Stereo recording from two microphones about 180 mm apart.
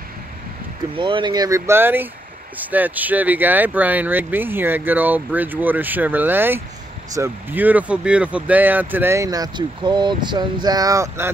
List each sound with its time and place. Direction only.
0.9 s speech: 30° right (ahead or behind)